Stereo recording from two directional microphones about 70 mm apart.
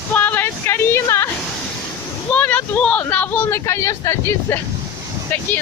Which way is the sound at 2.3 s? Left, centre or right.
Left.